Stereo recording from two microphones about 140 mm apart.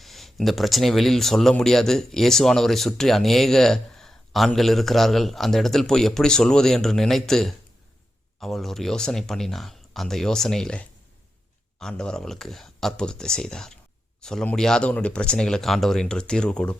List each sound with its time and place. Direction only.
0.0 s speech: centre (ahead or behind)